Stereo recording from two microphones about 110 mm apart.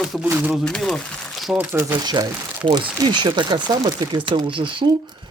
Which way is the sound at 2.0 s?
40° right (ahead or behind).